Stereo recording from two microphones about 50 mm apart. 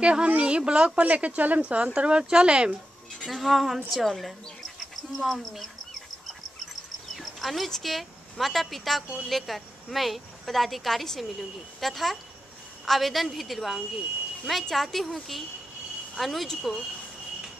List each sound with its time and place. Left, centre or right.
0.0 s a woman's voice: right
3.3 s speech: centre
6.2 s insect: centre
9.3 s speech: centre